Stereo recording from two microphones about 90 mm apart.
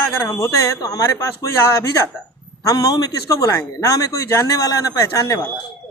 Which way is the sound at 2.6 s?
40° left (ahead or behind).